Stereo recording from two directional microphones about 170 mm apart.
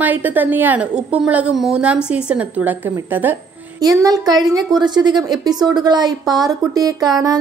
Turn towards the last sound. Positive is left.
turn(degrees=-20)  # may be behind; listen again after turning